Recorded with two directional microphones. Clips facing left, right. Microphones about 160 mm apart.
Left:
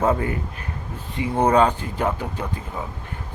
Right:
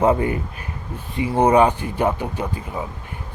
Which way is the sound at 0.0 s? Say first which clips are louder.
Right 3 dB; 20° right (ahead or behind).